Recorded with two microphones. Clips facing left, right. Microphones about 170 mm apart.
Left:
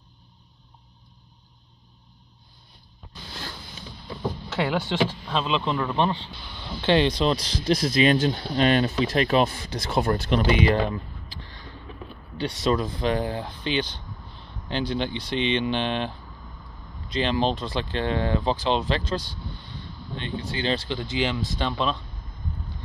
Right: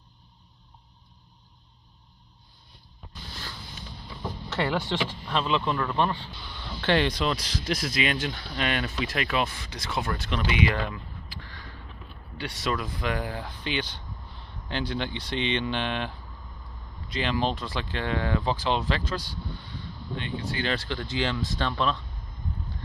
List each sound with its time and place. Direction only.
4.5 s speech: 10° left (ahead or behind); by 11.0 s 35° left (ahead or behind)
11.4 s vehicle: 25° left (ahead or behind)
12.4 s speech: 25° left (ahead or behind)
17.1 s speech: 25° left (ahead or behind)
20.5 s speech: 20° left (ahead or behind)